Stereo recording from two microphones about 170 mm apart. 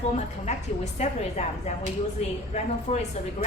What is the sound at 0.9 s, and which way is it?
Speech, 40° left (ahead or behind).